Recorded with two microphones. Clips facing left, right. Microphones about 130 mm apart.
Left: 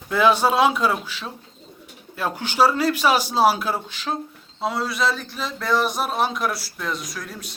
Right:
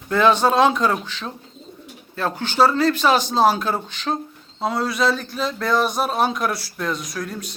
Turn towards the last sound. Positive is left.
turn(degrees=0)  # may be behind; listen again after turning